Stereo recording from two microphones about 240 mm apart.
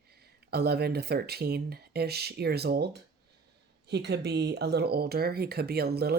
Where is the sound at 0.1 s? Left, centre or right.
Right.